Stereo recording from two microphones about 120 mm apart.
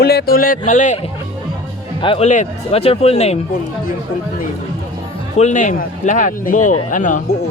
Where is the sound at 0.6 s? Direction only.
90° left.